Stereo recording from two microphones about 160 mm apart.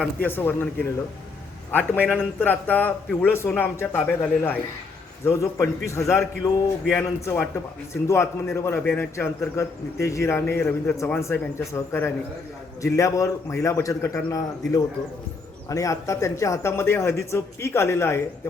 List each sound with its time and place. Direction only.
0.0 s a man's voice: 10° left (ahead or behind)
1.7 s a man's voice: 10° left (ahead or behind)